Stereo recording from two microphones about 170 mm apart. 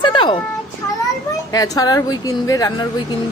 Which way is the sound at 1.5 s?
20° left (ahead or behind).